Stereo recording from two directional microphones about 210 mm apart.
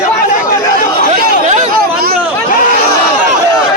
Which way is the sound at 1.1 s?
35° right (ahead or behind).